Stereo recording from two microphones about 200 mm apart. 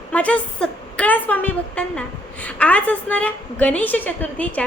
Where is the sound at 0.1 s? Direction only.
5° left (ahead or behind).